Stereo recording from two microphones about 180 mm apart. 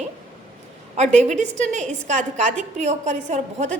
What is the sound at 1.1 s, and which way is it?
A woman's voice, 40° right (ahead or behind).